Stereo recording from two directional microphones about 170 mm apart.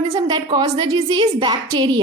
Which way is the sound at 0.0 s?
25° right (ahead or behind).